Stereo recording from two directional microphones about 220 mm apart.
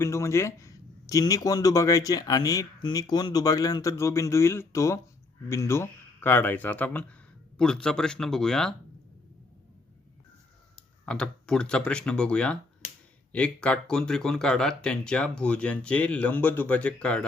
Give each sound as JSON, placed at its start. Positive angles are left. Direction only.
{"t": 0.0, "sound": "speech", "side_deg": 10}
{"t": 10.8, "sound": "speech", "side_deg": 5}